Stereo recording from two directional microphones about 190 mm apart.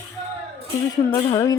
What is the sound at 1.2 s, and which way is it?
Music, 20° left (ahead or behind).